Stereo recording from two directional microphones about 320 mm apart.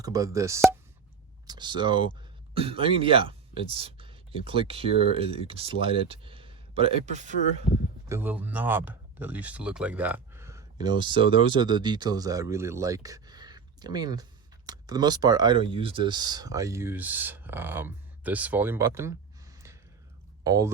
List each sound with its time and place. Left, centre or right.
0.0 s speech: centre
8.0 s speech: centre